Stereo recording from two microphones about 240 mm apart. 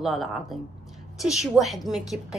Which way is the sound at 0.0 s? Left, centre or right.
Centre.